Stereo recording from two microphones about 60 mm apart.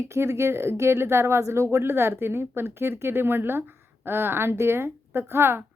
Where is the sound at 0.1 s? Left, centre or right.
Right.